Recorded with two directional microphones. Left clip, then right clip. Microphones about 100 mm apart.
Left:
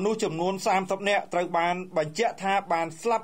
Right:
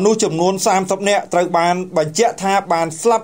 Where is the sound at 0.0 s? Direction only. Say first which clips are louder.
Right 12 dB; 15° right (ahead or behind).